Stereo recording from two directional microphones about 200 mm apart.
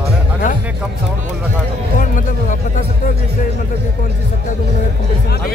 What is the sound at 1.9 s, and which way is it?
Speech, 40° left (ahead or behind).